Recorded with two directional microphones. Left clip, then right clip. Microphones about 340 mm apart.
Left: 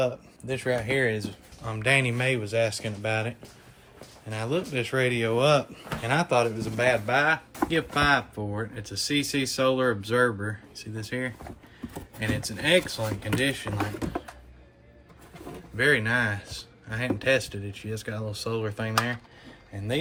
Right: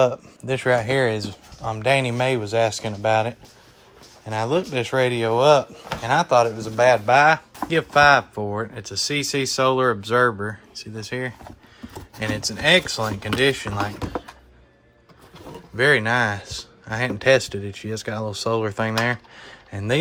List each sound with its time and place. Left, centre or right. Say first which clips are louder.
0.4 s speech: right 8 dB; centre
15.7 s speech: right 5 dB; centre